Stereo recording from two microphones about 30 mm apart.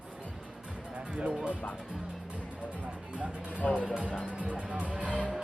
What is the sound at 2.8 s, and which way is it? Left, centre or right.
Speech, right.